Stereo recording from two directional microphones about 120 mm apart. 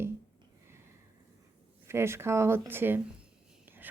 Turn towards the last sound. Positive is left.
turn(degrees=-15)  # may be behind; listen again after turning